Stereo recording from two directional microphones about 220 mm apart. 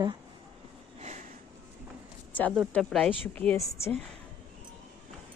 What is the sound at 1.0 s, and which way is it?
Sniff, 30° right (ahead or behind).